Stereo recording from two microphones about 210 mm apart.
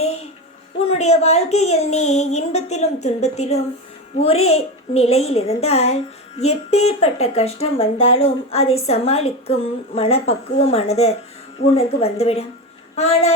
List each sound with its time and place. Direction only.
0.8 s a woman's voice: 30° left (ahead or behind)